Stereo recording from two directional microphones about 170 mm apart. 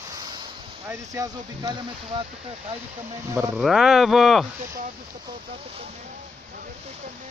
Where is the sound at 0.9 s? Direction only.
20° right (ahead or behind).